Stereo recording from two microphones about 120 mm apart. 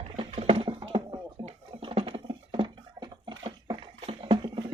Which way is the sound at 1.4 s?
45° right (ahead or behind).